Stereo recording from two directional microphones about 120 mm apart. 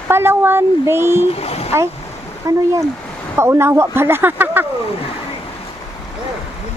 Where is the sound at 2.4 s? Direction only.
30° right (ahead or behind).